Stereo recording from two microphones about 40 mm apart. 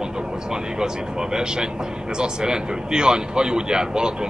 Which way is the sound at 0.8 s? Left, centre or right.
Centre.